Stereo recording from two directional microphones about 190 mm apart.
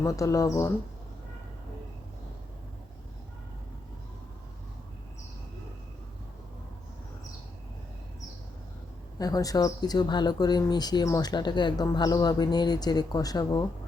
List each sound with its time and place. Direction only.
0.0 s speech: 15° left (ahead or behind)
9.1 s speech: 20° left (ahead or behind)